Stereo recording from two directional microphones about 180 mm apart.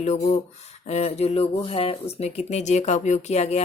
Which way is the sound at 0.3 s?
35° left (ahead or behind).